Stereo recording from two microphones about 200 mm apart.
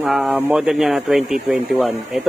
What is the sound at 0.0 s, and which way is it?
Speech, centre (ahead or behind).